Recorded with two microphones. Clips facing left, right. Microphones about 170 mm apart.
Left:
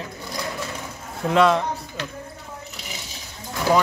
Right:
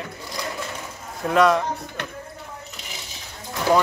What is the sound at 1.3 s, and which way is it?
Speech, centre (ahead or behind).